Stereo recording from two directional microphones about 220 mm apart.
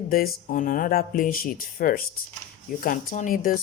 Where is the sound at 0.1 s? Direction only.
40° left (ahead or behind).